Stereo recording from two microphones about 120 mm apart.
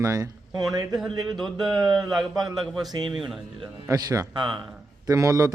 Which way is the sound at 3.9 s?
30° right (ahead or behind).